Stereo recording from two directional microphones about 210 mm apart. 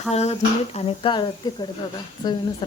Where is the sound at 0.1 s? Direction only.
30° left (ahead or behind).